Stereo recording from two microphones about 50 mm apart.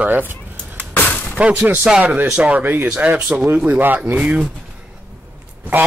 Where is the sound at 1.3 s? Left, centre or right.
Right.